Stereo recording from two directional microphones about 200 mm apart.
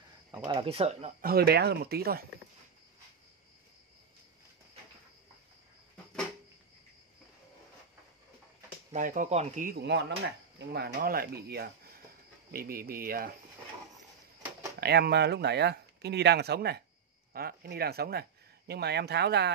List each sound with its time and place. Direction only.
0.5 s speech: 25° right (ahead or behind)
1.2 s speech: 50° right (ahead or behind)
8.9 s speech: 40° right (ahead or behind)
14.8 s speech: 55° right (ahead or behind)